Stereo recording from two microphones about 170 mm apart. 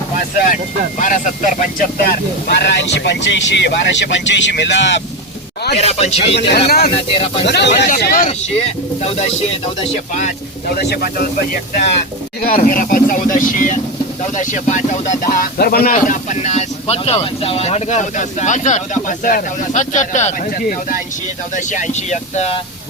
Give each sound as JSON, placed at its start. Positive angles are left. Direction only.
{"t": 0.4, "sound": "speech", "side_deg": 50}
{"t": 5.7, "sound": "speech", "side_deg": 40}
{"t": 6.7, "sound": "speech", "side_deg": 65}
{"t": 7.4, "sound": "speech", "side_deg": 90}
{"t": 7.9, "sound": "speech", "side_deg": 55}
{"t": 10.8, "sound": "speech", "side_deg": 70}
{"t": 21.5, "sound": "speech", "side_deg": 45}